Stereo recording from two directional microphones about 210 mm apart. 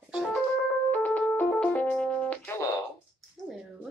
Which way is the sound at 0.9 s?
10° left (ahead or behind).